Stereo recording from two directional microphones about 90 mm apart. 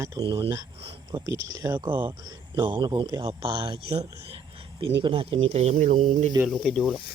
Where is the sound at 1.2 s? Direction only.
40° right (ahead or behind).